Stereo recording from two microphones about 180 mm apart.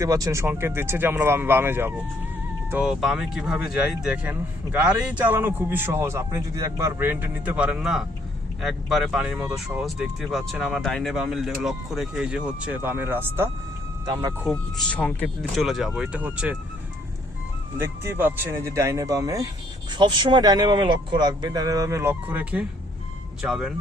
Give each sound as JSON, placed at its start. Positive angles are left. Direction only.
{"t": 0.0, "sound": "a man's voice", "side_deg": -20}
{"t": 14.0, "sound": "speech", "side_deg": -25}
{"t": 14.5, "sound": "speech", "side_deg": 5}
{"t": 17.7, "sound": "a man's voice", "side_deg": -15}